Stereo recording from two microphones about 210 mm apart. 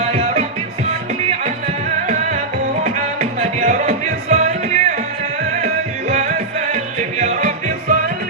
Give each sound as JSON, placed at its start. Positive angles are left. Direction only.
{"t": 0.0, "sound": "music", "side_deg": -30}
{"t": 2.0, "sound": "music", "side_deg": -35}